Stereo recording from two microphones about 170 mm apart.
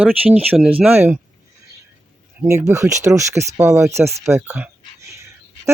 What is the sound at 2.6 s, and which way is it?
Speech, 15° right (ahead or behind).